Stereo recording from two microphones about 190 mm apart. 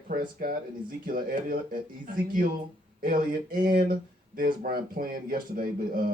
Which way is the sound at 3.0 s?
50° right (ahead or behind).